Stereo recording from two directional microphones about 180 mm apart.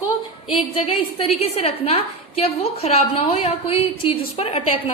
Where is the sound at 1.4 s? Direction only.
35° left (ahead or behind).